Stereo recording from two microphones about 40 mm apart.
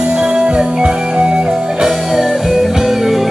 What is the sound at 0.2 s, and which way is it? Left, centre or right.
Music, right.